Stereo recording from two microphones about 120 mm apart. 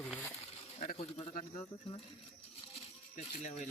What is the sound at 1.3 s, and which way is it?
Bird, 90° left.